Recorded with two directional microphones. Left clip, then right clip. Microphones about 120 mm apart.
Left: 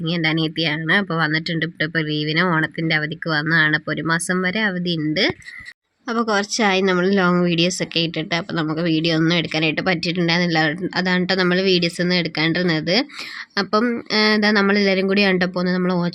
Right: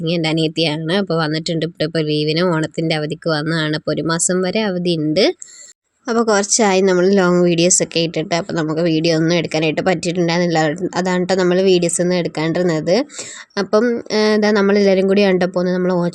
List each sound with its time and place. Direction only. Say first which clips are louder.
0.0 s speech: right 3 dB; 35° right (ahead or behind)
6.1 s a woman's voice: right 5 dB; 60° right (ahead or behind); by 16.1 s 45° right (ahead or behind)